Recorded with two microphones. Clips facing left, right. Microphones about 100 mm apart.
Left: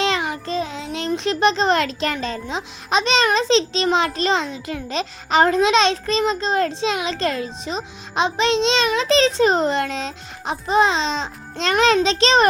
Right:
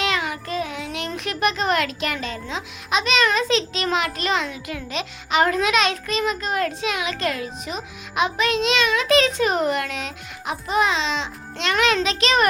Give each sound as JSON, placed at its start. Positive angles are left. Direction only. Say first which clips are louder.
{"t": 0.0, "sound": "a child's voice", "louder": "left 3 dB", "side_deg": 30}